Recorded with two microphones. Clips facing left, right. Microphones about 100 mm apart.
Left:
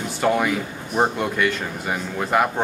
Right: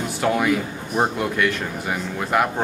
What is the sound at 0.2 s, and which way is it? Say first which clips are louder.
Speech: even; centre (ahead or behind).